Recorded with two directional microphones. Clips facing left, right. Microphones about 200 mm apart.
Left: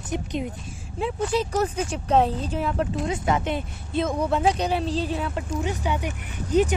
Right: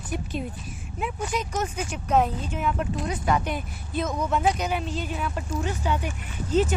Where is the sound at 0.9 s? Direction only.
30° left (ahead or behind).